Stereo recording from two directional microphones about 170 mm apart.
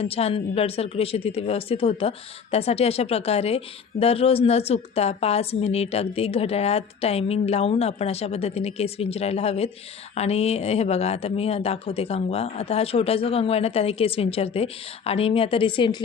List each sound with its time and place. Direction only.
0.0 s speech: 35° left (ahead or behind)